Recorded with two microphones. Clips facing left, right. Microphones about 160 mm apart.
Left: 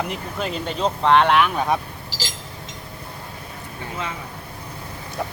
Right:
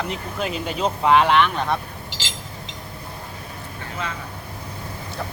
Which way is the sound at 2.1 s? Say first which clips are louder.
Left 5 dB; 40° left (ahead or behind).